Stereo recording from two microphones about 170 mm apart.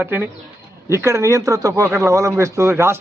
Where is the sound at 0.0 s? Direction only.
10° right (ahead or behind).